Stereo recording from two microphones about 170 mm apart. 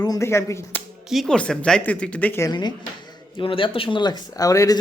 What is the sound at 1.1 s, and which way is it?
Speech, centre (ahead or behind).